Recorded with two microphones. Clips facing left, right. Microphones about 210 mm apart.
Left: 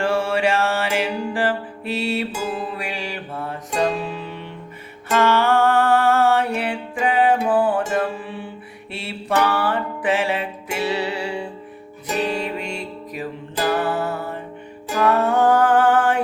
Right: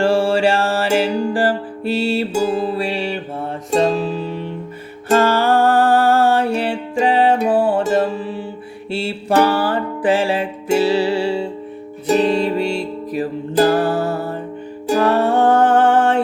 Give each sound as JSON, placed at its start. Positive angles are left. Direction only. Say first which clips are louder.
{"t": 0.0, "sound": "music", "louder": "right 5 dB", "side_deg": -30}